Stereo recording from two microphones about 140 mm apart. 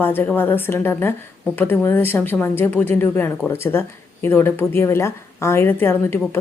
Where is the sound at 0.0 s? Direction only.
15° left (ahead or behind).